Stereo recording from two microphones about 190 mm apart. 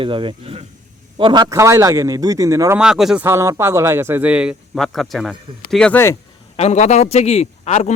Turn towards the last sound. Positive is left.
turn(degrees=35)  # may be behind; listen again after turning